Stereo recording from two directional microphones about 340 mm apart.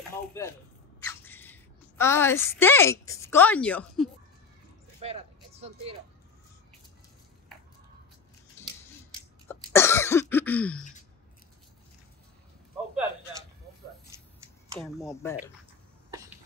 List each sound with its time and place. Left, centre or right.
0.3 s speech: centre
5.0 s vehicle: centre
8.6 s scissors: centre
9.5 s cough: centre
10.3 s speech: centre
10.8 s sigh: left
14.8 s speech: centre
16.1 s cough: centre